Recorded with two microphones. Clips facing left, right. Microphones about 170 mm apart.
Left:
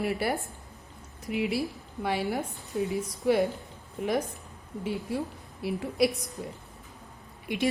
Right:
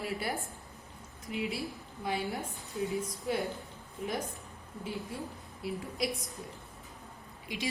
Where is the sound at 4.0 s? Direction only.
60° left (ahead or behind).